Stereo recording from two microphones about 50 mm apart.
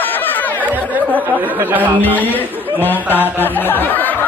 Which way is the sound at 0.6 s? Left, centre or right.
Right.